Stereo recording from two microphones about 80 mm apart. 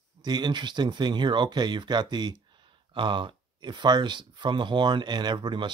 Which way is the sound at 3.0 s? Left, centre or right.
Right.